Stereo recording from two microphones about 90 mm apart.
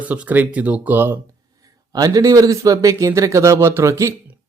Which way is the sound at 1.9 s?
45° right (ahead or behind).